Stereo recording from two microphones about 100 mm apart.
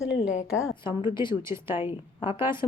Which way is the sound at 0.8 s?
50° left (ahead or behind).